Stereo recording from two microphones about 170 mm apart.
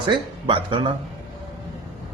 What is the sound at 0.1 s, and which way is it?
Speech, 30° right (ahead or behind).